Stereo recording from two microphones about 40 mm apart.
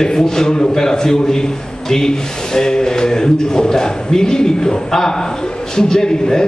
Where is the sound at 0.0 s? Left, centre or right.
Centre.